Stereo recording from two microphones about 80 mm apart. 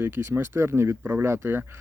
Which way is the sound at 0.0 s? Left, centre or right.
Right.